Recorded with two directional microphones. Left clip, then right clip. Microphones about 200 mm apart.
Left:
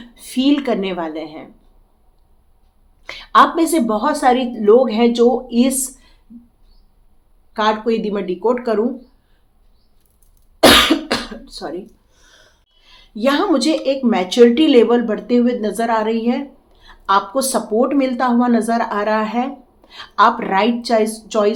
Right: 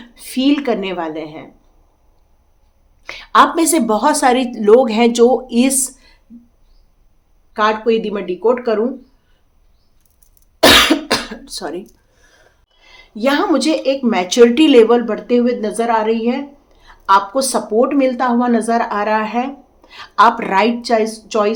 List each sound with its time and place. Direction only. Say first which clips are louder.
0.0 s speech: right 1 dB; 15° right (ahead or behind)
3.0 s a woman's voice: right 1 dB; 15° right (ahead or behind)
7.5 s speech: right 3 dB; 15° right (ahead or behind)
10.6 s cough: right 1 dB; 20° right (ahead or behind)
12.8 s speech: right 1 dB; 15° right (ahead or behind)